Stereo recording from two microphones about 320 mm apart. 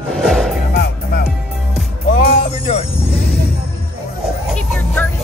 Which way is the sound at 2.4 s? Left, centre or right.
Centre.